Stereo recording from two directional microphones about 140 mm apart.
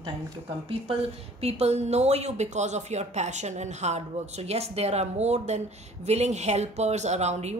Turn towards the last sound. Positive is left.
turn(degrees=-50)  # may be behind; listen again after turning